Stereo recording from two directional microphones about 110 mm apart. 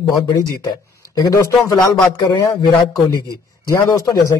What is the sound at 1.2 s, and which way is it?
Speech, 35° left (ahead or behind).